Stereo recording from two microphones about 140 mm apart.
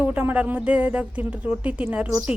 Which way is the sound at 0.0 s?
10° right (ahead or behind).